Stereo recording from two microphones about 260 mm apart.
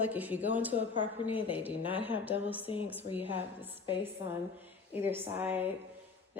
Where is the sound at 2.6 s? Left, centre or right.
Left.